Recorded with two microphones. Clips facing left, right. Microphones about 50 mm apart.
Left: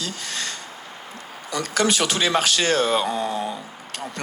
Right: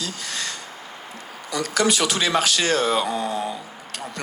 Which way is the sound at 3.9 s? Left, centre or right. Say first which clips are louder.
Left 1 dB; left.